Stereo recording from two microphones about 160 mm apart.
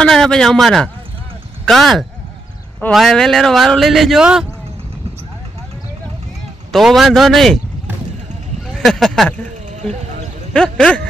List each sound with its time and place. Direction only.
0.0 s speech: 5° left (ahead or behind)
6.7 s speech: centre (ahead or behind)
8.7 s speech: centre (ahead or behind)
9.7 s a sound: 45° right (ahead or behind)
10.5 s speech: 5° left (ahead or behind)